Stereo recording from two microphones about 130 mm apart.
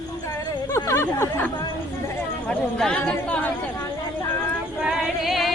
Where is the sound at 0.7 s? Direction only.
20° left (ahead or behind).